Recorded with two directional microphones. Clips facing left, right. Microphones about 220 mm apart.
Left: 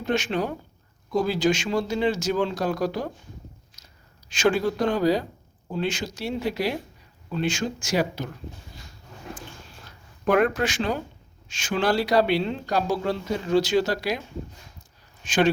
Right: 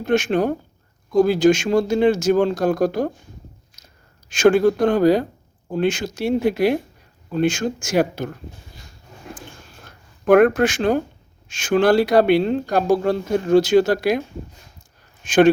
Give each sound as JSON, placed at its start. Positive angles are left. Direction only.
{"t": 0.0, "sound": "speech", "side_deg": -50}
{"t": 4.3, "sound": "speech", "side_deg": -50}
{"t": 9.8, "sound": "speech", "side_deg": -55}